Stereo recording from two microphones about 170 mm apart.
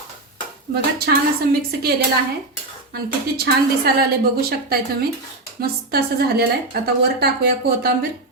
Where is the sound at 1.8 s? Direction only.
65° right (ahead or behind).